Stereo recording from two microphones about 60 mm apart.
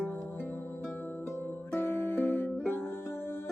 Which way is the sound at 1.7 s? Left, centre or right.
Left.